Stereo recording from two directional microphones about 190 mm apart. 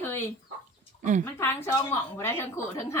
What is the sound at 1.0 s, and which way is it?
Speech, 40° right (ahead or behind).